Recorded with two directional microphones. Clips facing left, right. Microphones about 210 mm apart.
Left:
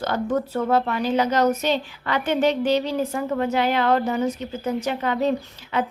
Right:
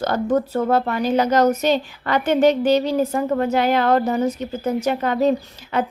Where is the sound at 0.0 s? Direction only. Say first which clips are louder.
Right 4 dB; 40° right (ahead or behind).